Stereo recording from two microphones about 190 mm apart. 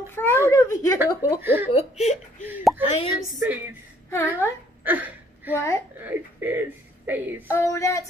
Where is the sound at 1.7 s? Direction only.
35° left (ahead or behind).